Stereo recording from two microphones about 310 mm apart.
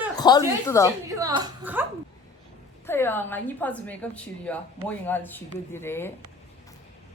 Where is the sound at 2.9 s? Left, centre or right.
Centre.